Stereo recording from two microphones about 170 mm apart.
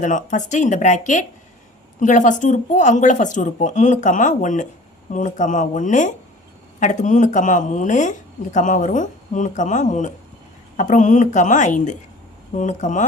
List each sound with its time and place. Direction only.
0.0 s speech: 50° left (ahead or behind)